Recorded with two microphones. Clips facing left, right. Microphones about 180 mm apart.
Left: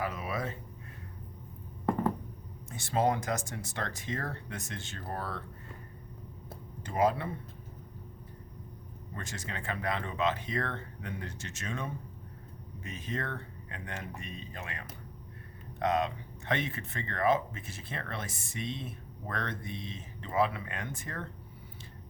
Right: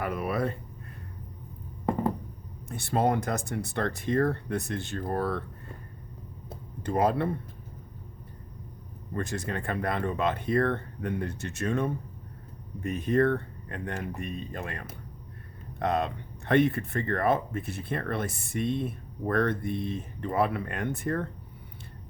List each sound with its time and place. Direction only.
0.0 s a sound: 60° right (ahead or behind)
2.6 s speech: 60° right (ahead or behind)
6.8 s speech: 55° right (ahead or behind)
9.1 s speech: 60° right (ahead or behind)